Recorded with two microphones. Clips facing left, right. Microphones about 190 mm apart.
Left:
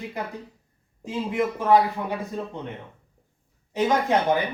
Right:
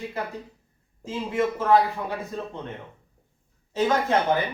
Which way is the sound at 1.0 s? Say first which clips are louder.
Even; 15° left (ahead or behind).